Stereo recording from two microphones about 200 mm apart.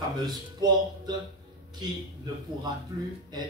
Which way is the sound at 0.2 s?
20° right (ahead or behind).